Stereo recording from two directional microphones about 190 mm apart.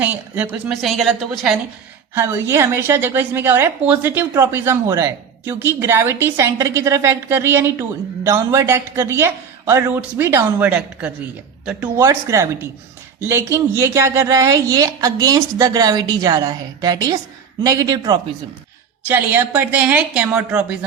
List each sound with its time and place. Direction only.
0.0 s a woman's voice: 10° right (ahead or behind)
2.1 s a woman's voice: 15° right (ahead or behind)
19.0 s a woman's voice: 10° right (ahead or behind)